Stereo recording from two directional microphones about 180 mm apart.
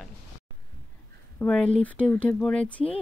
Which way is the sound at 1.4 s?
5° left (ahead or behind).